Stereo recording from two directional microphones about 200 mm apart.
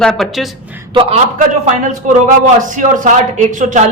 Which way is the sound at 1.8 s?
40° right (ahead or behind).